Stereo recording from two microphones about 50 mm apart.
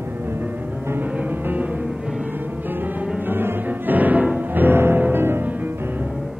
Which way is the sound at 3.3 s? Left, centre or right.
Right.